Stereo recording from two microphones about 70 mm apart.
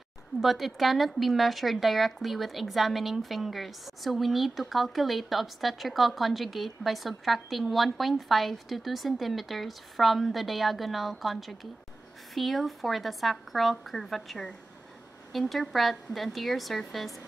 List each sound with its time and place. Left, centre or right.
0.4 s a woman's voice: centre